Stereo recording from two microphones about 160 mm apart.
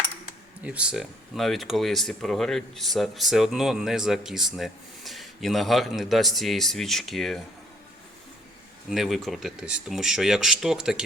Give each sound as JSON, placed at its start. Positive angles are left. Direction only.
{"t": 0.6, "sound": "speech", "side_deg": -10}
{"t": 8.9, "sound": "speech", "side_deg": 0}